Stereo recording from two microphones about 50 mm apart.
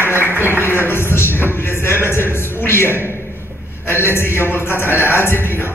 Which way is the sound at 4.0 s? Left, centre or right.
Left.